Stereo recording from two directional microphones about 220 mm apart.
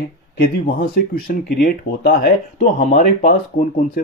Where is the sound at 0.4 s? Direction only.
40° left (ahead or behind).